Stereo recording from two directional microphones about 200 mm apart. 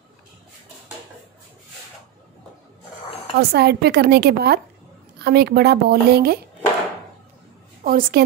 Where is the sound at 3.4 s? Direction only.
55° right (ahead or behind).